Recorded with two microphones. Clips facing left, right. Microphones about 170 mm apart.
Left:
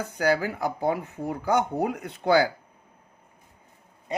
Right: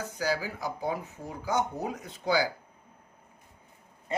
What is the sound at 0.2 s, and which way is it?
Speech, 60° left (ahead or behind).